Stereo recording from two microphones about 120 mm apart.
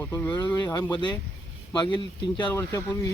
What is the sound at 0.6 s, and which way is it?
Speech, 35° left (ahead or behind).